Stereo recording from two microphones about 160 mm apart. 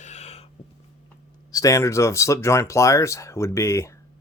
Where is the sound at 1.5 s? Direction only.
20° left (ahead or behind).